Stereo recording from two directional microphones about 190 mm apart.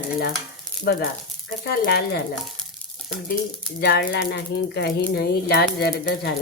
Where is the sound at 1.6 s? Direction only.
55° left (ahead or behind).